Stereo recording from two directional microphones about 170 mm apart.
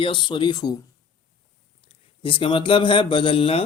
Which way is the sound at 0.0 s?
30° left (ahead or behind).